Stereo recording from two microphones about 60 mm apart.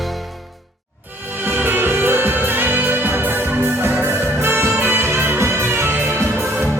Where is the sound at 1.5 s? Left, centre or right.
Right.